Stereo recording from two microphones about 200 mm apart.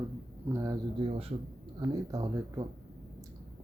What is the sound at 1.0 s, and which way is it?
Speech, 30° right (ahead or behind).